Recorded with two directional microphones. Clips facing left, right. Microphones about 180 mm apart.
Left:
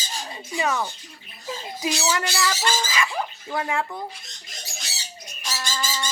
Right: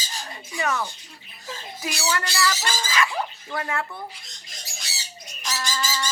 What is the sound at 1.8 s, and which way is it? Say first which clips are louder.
Speech: left 2 dB; 20° left (ahead or behind).